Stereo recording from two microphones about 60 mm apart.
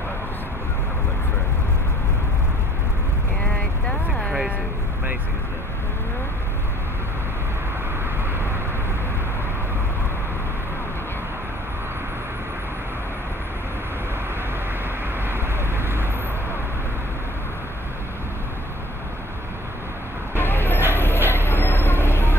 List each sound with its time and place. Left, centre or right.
15.2 s vehicle: right
20.3 s vehicle: left
20.9 s a sound: left
21.3 s vehicle: left